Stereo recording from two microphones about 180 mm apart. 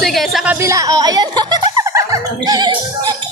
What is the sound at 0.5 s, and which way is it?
Music, 15° right (ahead or behind).